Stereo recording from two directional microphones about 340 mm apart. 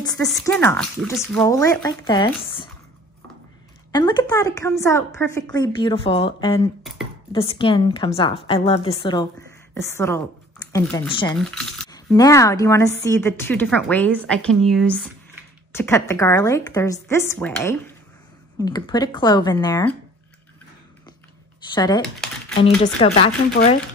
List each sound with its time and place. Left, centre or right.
0.0 s a woman's voice: centre
3.9 s a woman's voice: centre
11.3 s a woman's voice: centre
21.7 s a woman's voice: centre